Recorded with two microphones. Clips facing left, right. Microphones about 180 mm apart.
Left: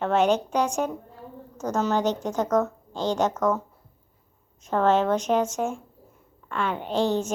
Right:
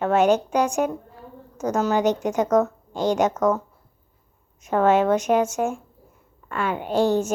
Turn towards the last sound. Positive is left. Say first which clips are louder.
# right 4 dB
turn(degrees=-10)  # may be behind; listen again after turning